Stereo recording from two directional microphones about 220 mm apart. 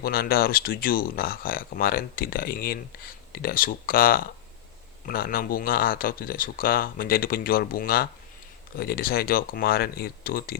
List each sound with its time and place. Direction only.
0.0 s speech: 45° left (ahead or behind)